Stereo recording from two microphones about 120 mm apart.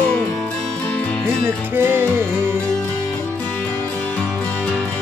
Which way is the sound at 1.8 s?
20° right (ahead or behind).